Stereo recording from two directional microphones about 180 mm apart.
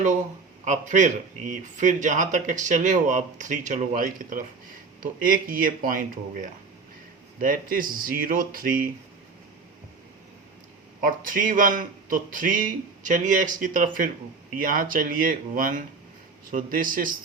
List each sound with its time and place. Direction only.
0.6 s speech: 40° right (ahead or behind)
11.0 s speech: 50° right (ahead or behind)